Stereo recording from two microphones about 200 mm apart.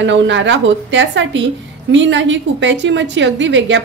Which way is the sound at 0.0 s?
65° right (ahead or behind).